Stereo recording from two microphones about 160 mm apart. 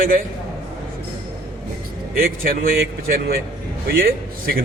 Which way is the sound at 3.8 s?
70° right (ahead or behind).